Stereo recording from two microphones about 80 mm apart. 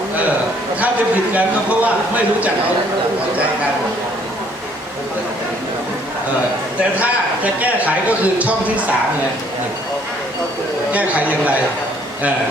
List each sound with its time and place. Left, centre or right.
1.3 s a man's voice: centre
6.9 s a man's voice: centre
10.9 s a man's voice: centre